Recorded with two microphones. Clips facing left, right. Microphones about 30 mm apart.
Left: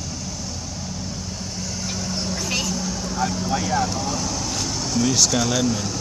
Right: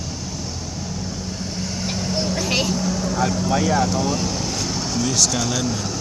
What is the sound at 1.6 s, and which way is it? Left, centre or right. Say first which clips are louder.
Vehicle: right 3 dB; right.